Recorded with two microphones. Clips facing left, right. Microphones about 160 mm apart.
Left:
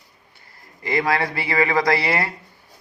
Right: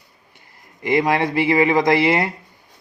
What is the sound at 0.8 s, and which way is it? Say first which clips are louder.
Speech: right 4 dB; 15° right (ahead or behind).